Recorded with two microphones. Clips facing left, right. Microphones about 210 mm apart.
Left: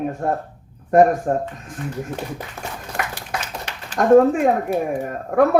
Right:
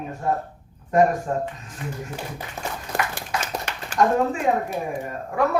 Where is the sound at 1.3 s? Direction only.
45° left (ahead or behind).